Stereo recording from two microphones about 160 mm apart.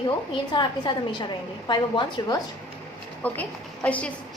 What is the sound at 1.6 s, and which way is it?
Speech, 30° left (ahead or behind).